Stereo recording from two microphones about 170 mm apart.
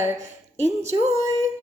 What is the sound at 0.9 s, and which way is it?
Speech, 30° right (ahead or behind).